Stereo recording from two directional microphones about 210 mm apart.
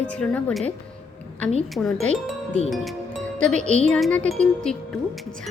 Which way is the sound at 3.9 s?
5° left (ahead or behind).